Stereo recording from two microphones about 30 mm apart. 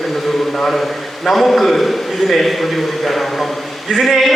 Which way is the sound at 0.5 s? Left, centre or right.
Centre.